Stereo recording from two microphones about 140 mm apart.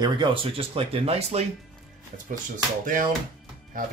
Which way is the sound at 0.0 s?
35° right (ahead or behind).